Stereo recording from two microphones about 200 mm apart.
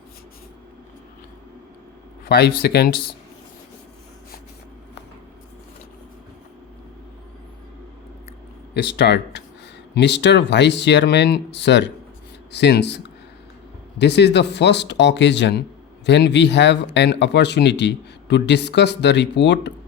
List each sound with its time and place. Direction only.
2.3 s speech: 55° left (ahead or behind)
8.7 s speech: 55° left (ahead or behind)